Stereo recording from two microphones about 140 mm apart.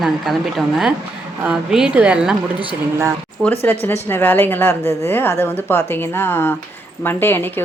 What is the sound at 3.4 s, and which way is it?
Speech, 10° left (ahead or behind).